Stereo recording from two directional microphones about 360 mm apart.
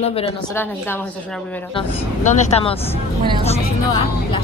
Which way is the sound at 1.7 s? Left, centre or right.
Centre.